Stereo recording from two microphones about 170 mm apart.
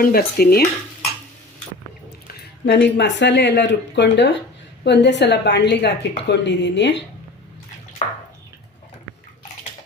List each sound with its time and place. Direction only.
0.0 s stir: 60° left (ahead or behind)
2.2 s a woman's voice: 70° left (ahead or behind); by 7.0 s 90° left